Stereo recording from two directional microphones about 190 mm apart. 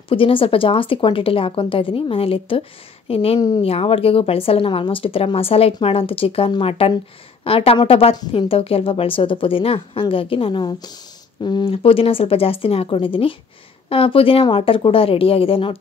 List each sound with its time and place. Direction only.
0.1 s a woman's voice: 25° left (ahead or behind)